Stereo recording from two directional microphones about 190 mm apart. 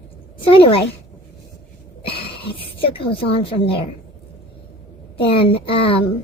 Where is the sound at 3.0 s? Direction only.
30° left (ahead or behind).